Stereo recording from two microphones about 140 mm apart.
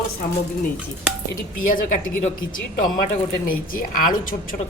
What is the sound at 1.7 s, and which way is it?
Speech, 75° left (ahead or behind).